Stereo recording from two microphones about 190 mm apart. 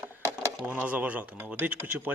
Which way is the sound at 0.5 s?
5° right (ahead or behind).